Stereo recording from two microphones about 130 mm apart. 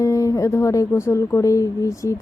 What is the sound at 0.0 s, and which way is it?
Speech, 25° left (ahead or behind).